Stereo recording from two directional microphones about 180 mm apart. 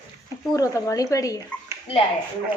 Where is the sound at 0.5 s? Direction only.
15° left (ahead or behind).